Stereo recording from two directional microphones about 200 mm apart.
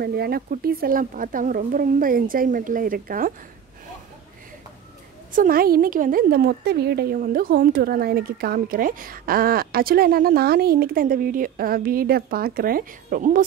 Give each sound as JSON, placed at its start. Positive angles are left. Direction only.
{"t": 0.0, "sound": "a woman's voice", "side_deg": -50}
{"t": 5.3, "sound": "a woman's voice", "side_deg": -45}